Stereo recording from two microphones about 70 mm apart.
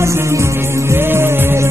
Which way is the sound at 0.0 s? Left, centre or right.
Right.